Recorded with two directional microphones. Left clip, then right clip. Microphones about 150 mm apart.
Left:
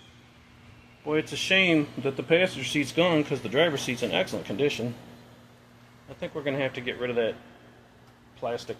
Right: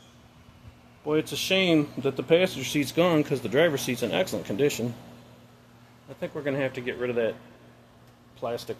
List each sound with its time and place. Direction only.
1.5 s speech: 25° right (ahead or behind)
6.1 s speech: 20° right (ahead or behind)
8.4 s speech: 30° right (ahead or behind)